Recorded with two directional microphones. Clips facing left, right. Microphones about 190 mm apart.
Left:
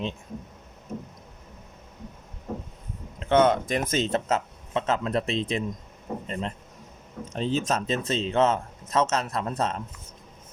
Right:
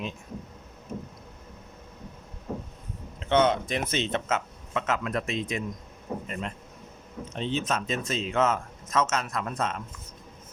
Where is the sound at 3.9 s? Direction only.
40° left (ahead or behind).